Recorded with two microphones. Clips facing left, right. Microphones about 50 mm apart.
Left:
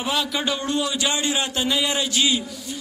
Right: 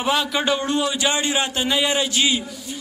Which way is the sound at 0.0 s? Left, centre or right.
Centre.